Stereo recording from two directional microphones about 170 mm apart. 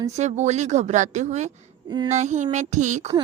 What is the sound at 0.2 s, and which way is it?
A woman's voice, 40° right (ahead or behind).